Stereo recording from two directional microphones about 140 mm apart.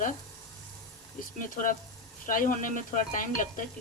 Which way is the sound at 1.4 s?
70° left (ahead or behind).